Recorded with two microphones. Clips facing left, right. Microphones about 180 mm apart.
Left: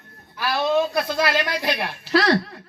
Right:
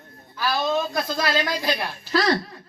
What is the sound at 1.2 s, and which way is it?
Speech, 65° left (ahead or behind).